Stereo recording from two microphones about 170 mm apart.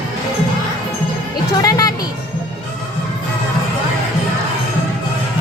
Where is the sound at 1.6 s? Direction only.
20° left (ahead or behind).